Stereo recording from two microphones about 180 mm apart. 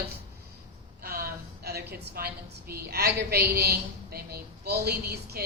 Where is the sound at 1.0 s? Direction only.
60° right (ahead or behind).